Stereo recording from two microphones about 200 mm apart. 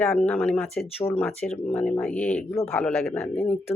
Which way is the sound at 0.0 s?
10° left (ahead or behind).